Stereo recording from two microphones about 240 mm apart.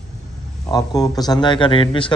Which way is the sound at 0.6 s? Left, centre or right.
Centre.